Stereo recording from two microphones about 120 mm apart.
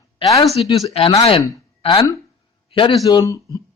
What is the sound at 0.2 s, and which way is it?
Speech, 50° left (ahead or behind).